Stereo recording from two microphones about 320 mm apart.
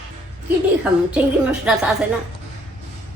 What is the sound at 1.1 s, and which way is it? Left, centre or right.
Speech, centre.